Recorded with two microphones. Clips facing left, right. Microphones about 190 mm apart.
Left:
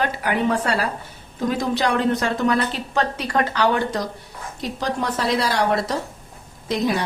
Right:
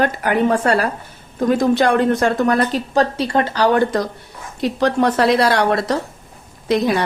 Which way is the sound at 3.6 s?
50° right (ahead or behind).